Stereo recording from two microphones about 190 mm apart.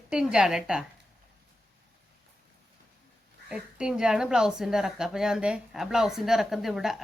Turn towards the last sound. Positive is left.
turn(degrees=0)  # may be behind; listen again after turning